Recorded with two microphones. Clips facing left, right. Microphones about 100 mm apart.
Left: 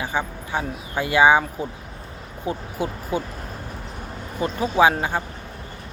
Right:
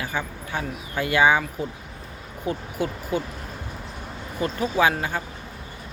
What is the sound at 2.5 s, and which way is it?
Speech, 25° left (ahead or behind).